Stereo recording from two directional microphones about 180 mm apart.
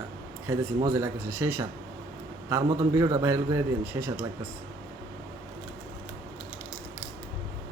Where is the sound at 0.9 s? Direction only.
15° right (ahead or behind).